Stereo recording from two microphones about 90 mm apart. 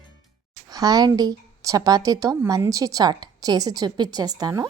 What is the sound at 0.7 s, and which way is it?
A woman's voice, 45° right (ahead or behind).